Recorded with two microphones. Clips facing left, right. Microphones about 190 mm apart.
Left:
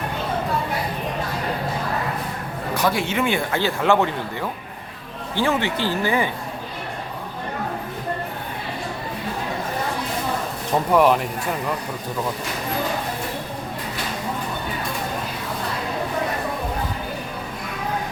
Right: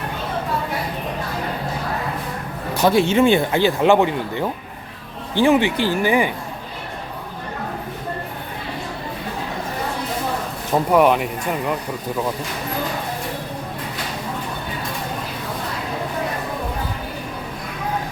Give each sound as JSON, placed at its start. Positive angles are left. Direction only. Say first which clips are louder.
{"t": 2.8, "sound": "speech", "louder": "right 7 dB", "side_deg": -25}
{"t": 10.9, "sound": "speech", "louder": "right 1 dB", "side_deg": -5}